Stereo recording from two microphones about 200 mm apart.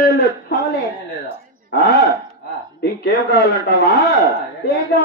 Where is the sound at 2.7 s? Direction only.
55° left (ahead or behind).